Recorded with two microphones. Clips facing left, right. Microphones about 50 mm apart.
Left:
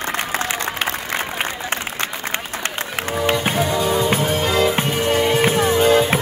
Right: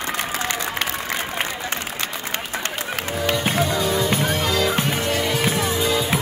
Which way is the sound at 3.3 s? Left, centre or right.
Centre.